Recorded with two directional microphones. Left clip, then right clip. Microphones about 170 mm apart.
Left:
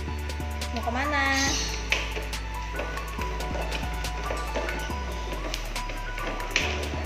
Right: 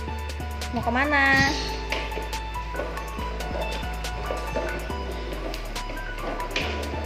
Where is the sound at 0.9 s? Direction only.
15° right (ahead or behind).